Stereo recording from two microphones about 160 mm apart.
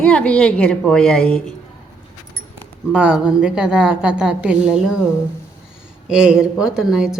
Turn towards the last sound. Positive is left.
turn(degrees=-5)  # may be behind; listen again after turning